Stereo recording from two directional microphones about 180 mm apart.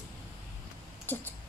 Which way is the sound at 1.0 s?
10° left (ahead or behind).